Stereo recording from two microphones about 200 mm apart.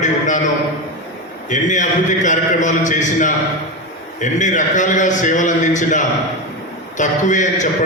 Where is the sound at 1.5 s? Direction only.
40° left (ahead or behind).